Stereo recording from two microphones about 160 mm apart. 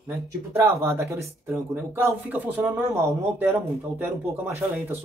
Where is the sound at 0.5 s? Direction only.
20° right (ahead or behind).